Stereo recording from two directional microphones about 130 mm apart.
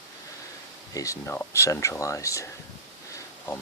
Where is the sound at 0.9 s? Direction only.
25° left (ahead or behind).